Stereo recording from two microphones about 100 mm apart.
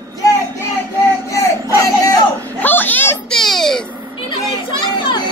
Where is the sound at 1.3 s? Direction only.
35° left (ahead or behind).